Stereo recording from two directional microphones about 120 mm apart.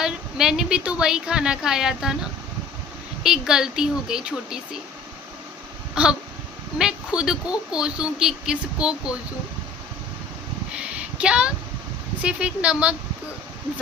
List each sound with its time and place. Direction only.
0.0 s a woman's voice: 5° right (ahead or behind)
3.2 s a woman's voice: 5° right (ahead or behind)
5.9 s a sound: 5° right (ahead or behind)
6.7 s a woman's voice: 5° right (ahead or behind)
10.7 s a sound: 10° right (ahead or behind)
12.2 s speech: 10° right (ahead or behind)